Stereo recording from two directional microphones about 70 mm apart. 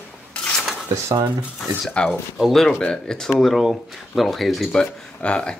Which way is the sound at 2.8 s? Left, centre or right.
Centre.